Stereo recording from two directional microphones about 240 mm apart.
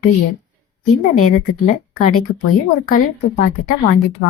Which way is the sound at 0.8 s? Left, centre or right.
Left.